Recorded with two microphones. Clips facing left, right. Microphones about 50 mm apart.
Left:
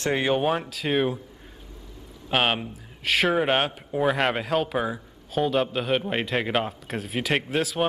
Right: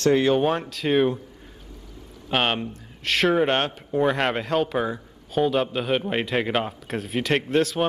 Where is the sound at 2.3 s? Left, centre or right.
Centre.